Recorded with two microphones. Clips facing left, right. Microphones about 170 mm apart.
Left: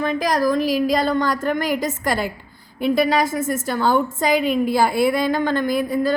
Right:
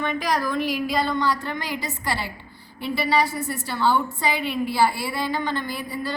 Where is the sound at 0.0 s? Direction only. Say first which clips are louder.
Left 5 dB; 40° left (ahead or behind).